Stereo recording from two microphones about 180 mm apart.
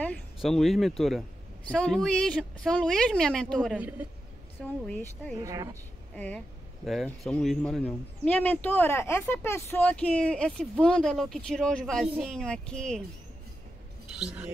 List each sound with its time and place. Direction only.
0.0 s speech: 5° left (ahead or behind)
4.8 s speech: 10° left (ahead or behind)
5.4 s speech: 15° right (ahead or behind)
6.1 s speech: 10° left (ahead or behind)
14.1 s speech: 5° right (ahead or behind)